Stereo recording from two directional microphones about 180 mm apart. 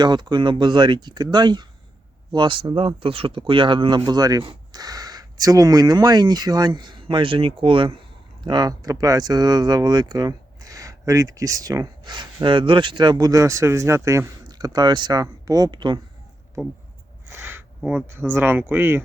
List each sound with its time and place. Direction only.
0.0 s speech: 25° right (ahead or behind)
17.2 s a sound: 10° right (ahead or behind)
17.7 s speech: 5° right (ahead or behind)